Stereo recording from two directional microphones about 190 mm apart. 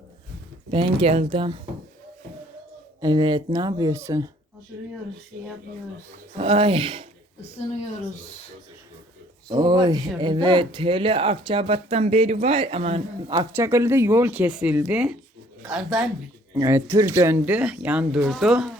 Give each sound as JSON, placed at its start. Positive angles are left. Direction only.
{"t": 0.7, "sound": "speech", "side_deg": -25}
{"t": 3.0, "sound": "speech", "side_deg": -25}
{"t": 6.3, "sound": "speech", "side_deg": -30}
{"t": 9.5, "sound": "speech", "side_deg": -20}
{"t": 13.3, "sound": "speech", "side_deg": -15}